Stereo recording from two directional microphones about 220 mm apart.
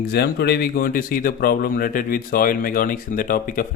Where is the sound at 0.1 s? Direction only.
45° left (ahead or behind).